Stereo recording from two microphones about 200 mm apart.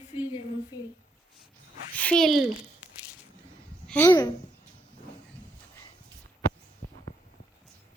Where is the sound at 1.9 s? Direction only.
5° left (ahead or behind).